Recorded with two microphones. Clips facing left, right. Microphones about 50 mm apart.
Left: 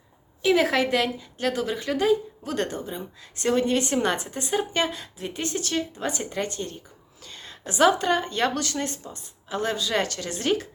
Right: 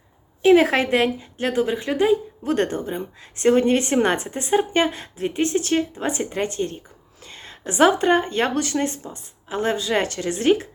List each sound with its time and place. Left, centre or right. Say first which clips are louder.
0.4 s a woman's voice: right 6 dB; right